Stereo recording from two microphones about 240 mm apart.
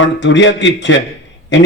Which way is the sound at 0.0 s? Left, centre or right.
Left.